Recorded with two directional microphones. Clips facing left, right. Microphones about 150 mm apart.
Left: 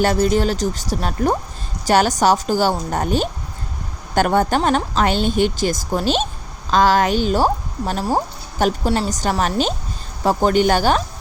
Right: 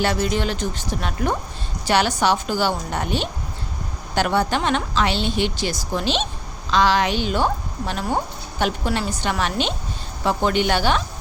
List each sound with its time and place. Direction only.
0.0 s speech: 40° left (ahead or behind)